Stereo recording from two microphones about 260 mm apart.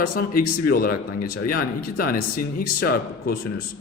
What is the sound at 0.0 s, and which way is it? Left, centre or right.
Speech, left.